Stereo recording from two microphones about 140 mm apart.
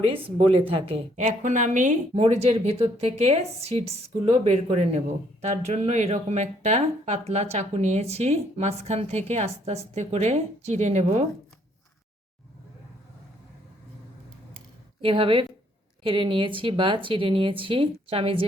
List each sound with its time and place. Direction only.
0.0 s speech: 40° right (ahead or behind)
1.1 s speech: 60° right (ahead or behind)
15.0 s speech: 40° right (ahead or behind)